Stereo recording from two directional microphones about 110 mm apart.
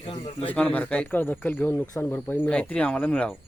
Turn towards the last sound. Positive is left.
turn(degrees=10)  # may be behind; listen again after turning